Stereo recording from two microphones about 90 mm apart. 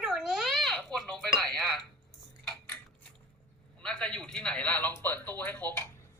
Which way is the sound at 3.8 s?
10° left (ahead or behind).